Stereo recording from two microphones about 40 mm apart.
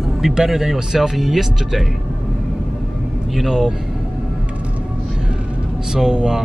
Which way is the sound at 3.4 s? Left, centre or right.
Centre.